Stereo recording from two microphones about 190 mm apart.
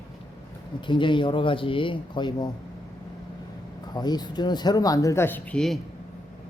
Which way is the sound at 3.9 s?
20° left (ahead or behind).